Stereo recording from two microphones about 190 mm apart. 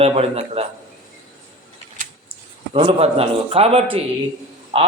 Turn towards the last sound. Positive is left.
turn(degrees=-30)  # may be behind; listen again after turning